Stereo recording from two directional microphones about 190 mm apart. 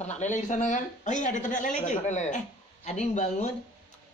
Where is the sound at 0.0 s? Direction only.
40° left (ahead or behind).